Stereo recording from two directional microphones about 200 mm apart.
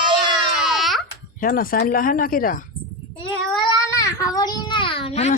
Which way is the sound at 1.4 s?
45° left (ahead or behind).